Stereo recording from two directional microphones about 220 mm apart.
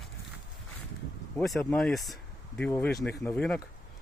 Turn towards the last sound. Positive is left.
turn(degrees=5)  # may be behind; listen again after turning